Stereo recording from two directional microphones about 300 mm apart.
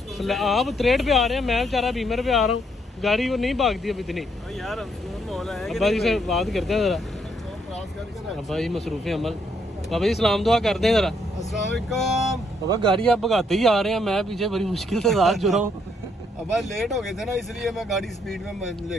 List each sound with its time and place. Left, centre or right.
0.2 s speech: centre
5.3 s speech: centre
8.5 s speech: centre
12.6 s speech: centre
13.0 s speech: centre